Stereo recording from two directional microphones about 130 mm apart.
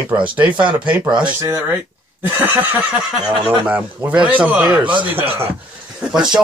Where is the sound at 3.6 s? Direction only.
10° right (ahead or behind).